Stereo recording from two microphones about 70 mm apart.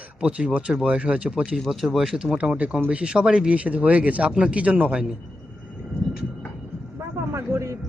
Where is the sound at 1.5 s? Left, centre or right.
Centre.